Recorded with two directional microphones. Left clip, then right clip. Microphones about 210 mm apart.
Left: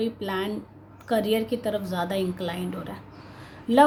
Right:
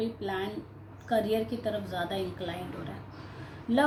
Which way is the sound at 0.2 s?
50° left (ahead or behind).